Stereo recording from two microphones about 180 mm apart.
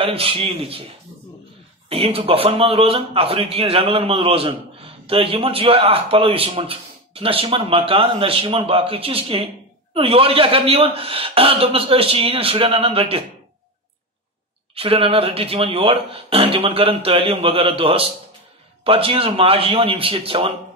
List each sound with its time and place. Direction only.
0.0 s a man's voice: 30° right (ahead or behind)
1.9 s a man's voice: 35° right (ahead or behind)
14.8 s a man's voice: 30° right (ahead or behind)